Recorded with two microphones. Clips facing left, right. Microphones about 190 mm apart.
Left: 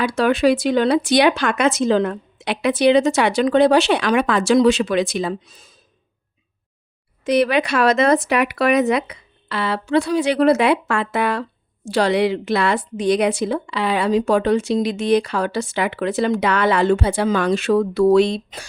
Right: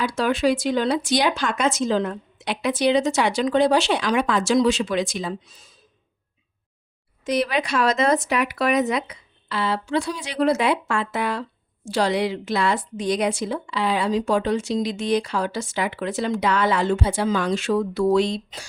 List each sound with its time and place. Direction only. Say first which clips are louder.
0.0 s a woman's voice: left 4 dB; 65° left (ahead or behind)
7.3 s a woman's voice: left 6 dB; 65° left (ahead or behind)